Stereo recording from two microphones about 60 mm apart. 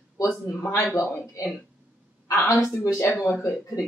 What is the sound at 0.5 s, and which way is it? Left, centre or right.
Speech, left.